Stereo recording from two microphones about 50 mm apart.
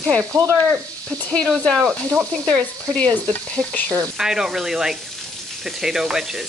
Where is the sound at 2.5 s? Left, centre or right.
Left.